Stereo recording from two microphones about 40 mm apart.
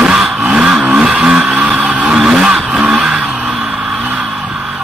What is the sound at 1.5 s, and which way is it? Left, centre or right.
Vehicle, right.